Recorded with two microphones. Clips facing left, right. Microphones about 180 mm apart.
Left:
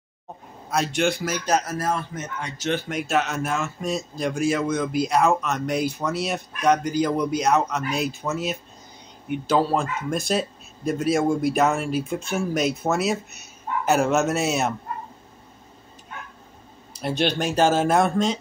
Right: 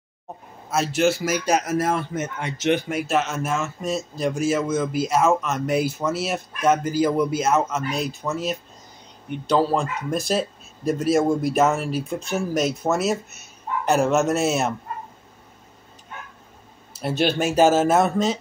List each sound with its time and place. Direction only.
0.7 s a man's voice: 5° right (ahead or behind)
17.0 s a man's voice: 5° right (ahead or behind)